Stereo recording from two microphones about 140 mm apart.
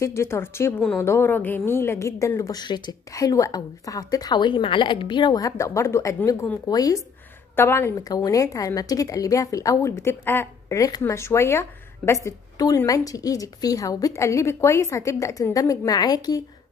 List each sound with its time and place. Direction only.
0.0 s a woman's voice: 20° left (ahead or behind)